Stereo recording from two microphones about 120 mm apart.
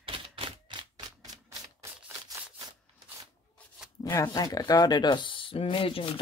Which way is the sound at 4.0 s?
30° left (ahead or behind).